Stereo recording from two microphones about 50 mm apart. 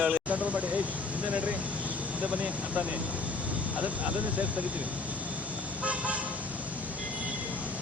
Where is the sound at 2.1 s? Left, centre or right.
Right.